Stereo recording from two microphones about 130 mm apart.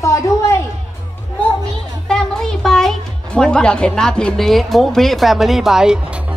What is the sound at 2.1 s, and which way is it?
A woman's voice, 5° left (ahead or behind).